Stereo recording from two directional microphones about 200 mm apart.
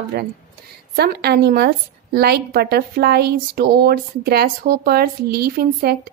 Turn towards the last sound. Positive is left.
turn(degrees=-50)  # may be behind; listen again after turning